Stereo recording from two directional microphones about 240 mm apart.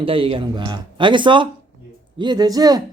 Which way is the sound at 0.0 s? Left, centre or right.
Right.